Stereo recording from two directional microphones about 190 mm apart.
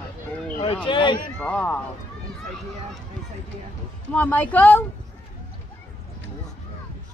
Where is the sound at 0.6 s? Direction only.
25° left (ahead or behind).